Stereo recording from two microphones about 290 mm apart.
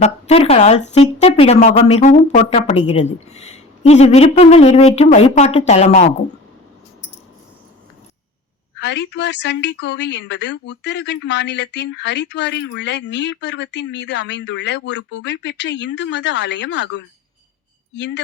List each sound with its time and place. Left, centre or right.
0.0 s speech: left
8.8 s a woman's voice: left